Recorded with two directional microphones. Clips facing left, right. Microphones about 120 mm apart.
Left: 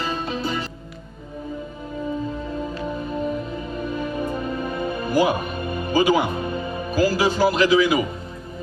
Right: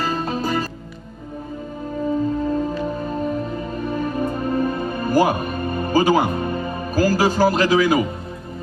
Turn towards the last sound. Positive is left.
turn(degrees=-40)  # may be behind; listen again after turning